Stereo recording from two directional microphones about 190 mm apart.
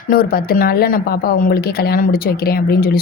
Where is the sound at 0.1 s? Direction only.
50° left (ahead or behind).